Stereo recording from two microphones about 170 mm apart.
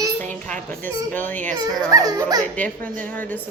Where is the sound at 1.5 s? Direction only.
25° right (ahead or behind).